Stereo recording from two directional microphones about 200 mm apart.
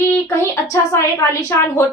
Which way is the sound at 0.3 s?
15° left (ahead or behind).